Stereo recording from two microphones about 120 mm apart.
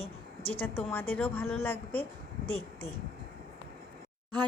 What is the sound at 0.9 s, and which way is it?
Speech, 15° left (ahead or behind).